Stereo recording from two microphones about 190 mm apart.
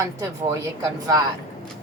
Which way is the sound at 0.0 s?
15° right (ahead or behind).